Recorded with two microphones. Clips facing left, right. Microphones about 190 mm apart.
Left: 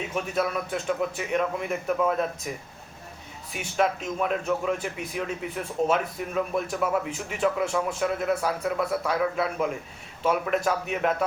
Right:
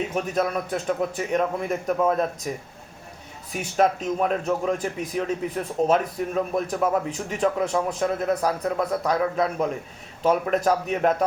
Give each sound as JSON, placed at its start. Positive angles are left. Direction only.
{"t": 0.1, "sound": "speech", "side_deg": -40}